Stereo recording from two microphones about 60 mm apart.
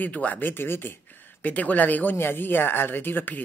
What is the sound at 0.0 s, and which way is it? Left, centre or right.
Speech, left.